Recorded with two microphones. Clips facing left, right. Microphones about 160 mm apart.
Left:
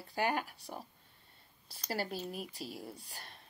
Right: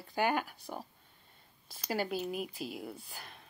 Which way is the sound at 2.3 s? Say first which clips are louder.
Right 4 dB; centre (ahead or behind).